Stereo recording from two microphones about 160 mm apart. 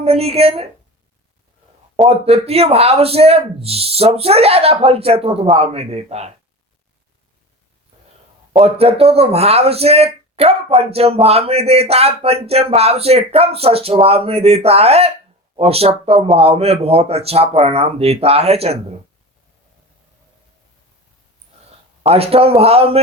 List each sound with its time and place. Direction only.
0.0 s speech: 40° right (ahead or behind)
2.0 s speech: 40° right (ahead or behind)
8.5 s speech: 40° right (ahead or behind)
22.0 s speech: 40° right (ahead or behind)